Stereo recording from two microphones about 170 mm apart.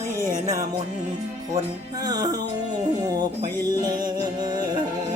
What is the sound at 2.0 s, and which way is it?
Mantra, 25° right (ahead or behind).